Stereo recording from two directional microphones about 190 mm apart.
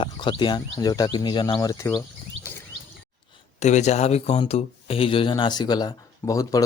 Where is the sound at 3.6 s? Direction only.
35° left (ahead or behind).